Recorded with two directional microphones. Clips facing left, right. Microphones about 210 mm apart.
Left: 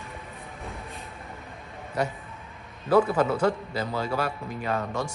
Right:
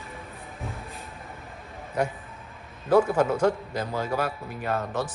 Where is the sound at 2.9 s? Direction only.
10° right (ahead or behind).